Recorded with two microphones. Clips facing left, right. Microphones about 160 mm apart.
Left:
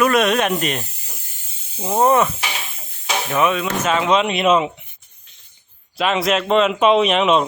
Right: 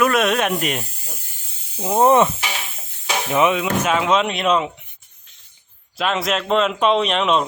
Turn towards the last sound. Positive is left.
turn(degrees=5)  # may be behind; listen again after turning